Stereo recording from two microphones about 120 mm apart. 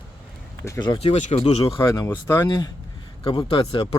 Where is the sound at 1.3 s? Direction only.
55° left (ahead or behind).